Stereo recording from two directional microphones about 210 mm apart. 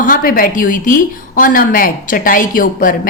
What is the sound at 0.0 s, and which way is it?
A woman's voice, 40° left (ahead or behind).